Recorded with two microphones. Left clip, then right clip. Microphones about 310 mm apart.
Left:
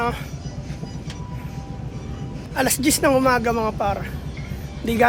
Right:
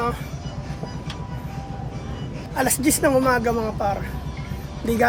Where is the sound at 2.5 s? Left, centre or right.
Centre.